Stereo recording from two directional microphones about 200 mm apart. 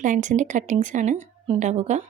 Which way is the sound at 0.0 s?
40° right (ahead or behind).